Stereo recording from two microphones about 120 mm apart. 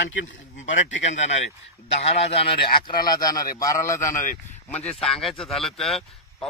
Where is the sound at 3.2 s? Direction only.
30° left (ahead or behind).